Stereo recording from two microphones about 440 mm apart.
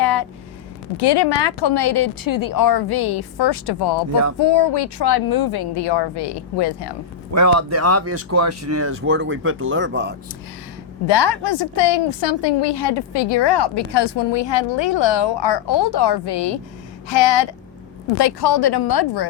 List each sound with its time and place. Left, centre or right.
0.0 s a sound: left
0.9 s a woman's voice: left
7.3 s speech: right
11.0 s a woman's voice: left